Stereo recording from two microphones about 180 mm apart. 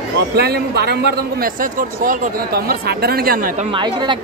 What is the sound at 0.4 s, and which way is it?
A man's voice, 65° right (ahead or behind).